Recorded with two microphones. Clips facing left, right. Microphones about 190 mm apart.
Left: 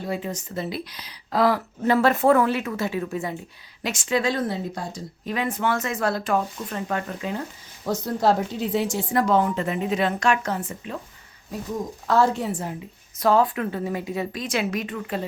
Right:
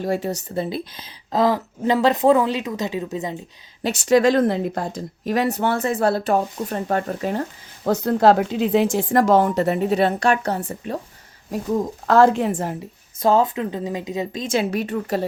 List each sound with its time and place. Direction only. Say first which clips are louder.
0.0 s a woman's voice: right 6 dB; 40° right (ahead or behind)
0.4 s speech: right 4 dB; 30° right (ahead or behind)
3.8 s speech: right 8 dB; 40° right (ahead or behind)
4.4 s a woman's voice: right 8 dB; 55° right (ahead or behind)
7.9 s speech: right 6 dB; 65° right (ahead or behind); by 8.7 s 85° right
9.4 s a woman's voice: right 5 dB; 40° right (ahead or behind)
12.0 s a woman's voice: right 5 dB; 55° right (ahead or behind)
13.2 s speech: right 2 dB; 25° right (ahead or behind); by 15.2 s 40° right (ahead or behind)